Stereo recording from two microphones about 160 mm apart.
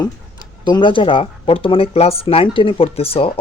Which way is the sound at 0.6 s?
30° left (ahead or behind).